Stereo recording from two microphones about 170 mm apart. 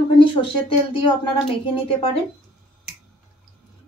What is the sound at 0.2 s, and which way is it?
A woman's voice, 30° left (ahead or behind).